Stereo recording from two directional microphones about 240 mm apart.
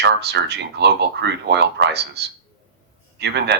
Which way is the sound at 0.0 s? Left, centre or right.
Right.